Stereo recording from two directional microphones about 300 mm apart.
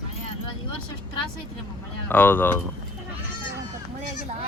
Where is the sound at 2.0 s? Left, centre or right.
Centre.